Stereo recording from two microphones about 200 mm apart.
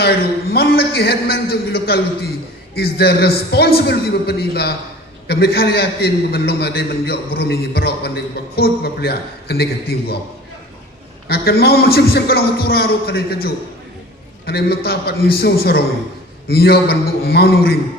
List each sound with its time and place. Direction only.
0.5 s a man's voice: 50° left (ahead or behind)
11.3 s a man's voice: 50° left (ahead or behind)